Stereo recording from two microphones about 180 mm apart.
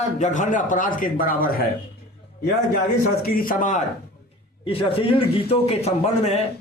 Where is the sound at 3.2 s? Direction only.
55° left (ahead or behind).